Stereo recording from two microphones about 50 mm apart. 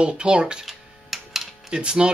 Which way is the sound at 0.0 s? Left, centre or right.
Centre.